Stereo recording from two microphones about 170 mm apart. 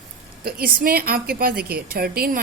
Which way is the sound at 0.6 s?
60° right (ahead or behind).